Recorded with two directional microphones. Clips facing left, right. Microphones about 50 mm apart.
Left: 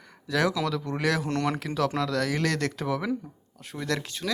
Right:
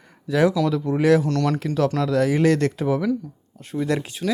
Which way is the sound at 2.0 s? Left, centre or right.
Centre.